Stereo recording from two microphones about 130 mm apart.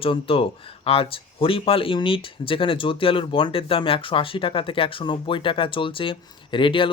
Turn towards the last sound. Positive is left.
turn(degrees=40)  # may be behind; listen again after turning